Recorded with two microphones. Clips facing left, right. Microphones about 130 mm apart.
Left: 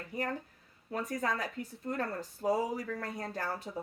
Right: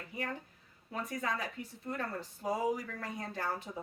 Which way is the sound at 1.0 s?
45° left (ahead or behind).